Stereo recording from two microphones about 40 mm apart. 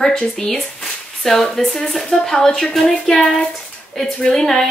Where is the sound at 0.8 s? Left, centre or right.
Centre.